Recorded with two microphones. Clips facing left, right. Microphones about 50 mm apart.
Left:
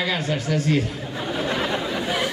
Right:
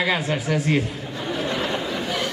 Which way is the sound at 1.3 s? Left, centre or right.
Centre.